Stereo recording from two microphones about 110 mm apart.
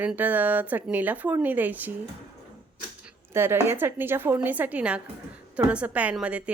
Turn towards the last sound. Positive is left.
turn(degrees=-10)  # may be behind; listen again after turning